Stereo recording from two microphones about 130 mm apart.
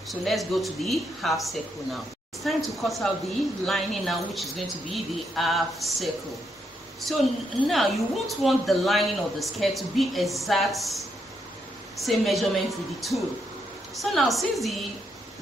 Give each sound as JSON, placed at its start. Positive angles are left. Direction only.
{"t": 0.1, "sound": "a woman's voice", "side_deg": 0}